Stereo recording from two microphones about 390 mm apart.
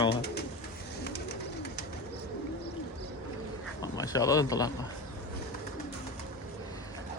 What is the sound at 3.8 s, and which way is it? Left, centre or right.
Speech, centre.